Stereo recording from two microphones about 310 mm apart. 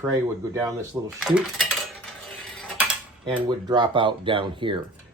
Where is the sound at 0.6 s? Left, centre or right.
Centre.